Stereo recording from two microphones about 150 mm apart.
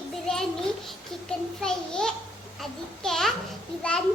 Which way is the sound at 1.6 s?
5° left (ahead or behind).